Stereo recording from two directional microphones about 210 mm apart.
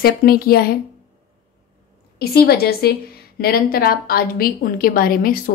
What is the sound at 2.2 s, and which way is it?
A woman's voice, 45° left (ahead or behind).